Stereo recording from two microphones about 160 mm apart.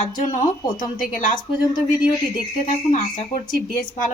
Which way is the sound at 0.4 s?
25° left (ahead or behind).